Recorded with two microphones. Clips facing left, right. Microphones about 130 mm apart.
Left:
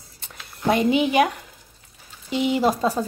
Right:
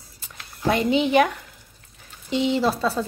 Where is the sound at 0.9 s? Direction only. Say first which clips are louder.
Even; 10° left (ahead or behind).